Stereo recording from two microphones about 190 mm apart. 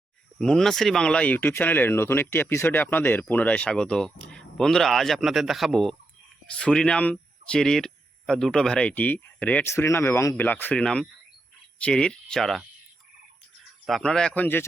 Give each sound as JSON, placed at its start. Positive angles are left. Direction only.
{"t": 0.3, "sound": "speech", "side_deg": 5}
{"t": 13.8, "sound": "speech", "side_deg": 0}